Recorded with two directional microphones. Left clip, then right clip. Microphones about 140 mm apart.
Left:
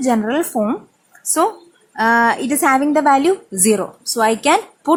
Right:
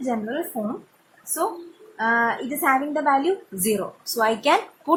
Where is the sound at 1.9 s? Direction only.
45° left (ahead or behind).